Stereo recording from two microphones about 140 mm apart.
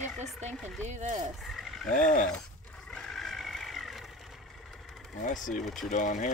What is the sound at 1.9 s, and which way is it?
Speech, 65° left (ahead or behind).